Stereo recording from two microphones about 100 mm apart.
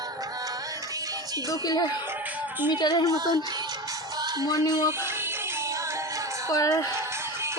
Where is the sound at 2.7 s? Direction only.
45° left (ahead or behind).